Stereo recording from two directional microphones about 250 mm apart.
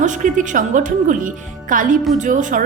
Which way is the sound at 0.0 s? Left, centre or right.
Right.